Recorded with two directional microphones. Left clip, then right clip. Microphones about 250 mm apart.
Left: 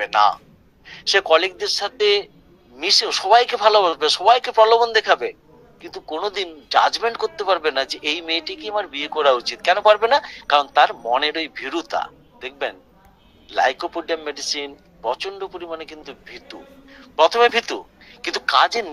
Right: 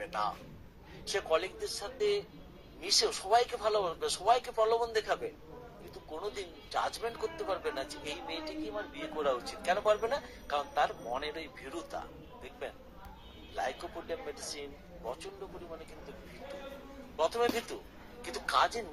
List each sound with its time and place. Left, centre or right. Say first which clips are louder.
0.0 s a man's voice: left 19 dB; left
17.2 s a man's voice: left 16 dB; left